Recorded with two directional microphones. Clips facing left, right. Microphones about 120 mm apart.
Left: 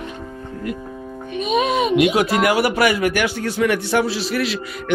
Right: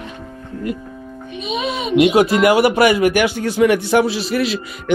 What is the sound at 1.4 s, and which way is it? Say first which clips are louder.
Speech: left 5 dB; 45° left (ahead or behind).